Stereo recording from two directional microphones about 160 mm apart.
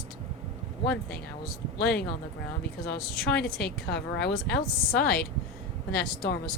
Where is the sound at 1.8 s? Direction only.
85° left.